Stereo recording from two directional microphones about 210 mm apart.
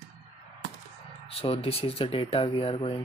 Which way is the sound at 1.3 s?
25° left (ahead or behind).